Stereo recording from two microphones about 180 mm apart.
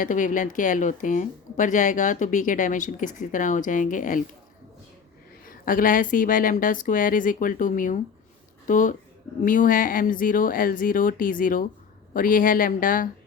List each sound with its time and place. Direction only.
0.0 s speech: 45° left (ahead or behind)
5.5 s speech: 50° left (ahead or behind)